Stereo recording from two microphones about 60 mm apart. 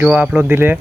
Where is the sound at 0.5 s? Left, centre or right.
Right.